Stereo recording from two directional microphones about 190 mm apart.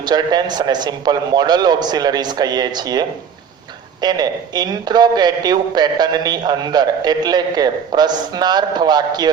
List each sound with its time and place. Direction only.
0.0 s a man's voice: 20° right (ahead or behind)